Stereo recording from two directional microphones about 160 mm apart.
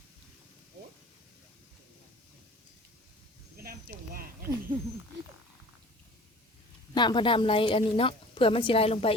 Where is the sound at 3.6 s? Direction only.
70° right (ahead or behind).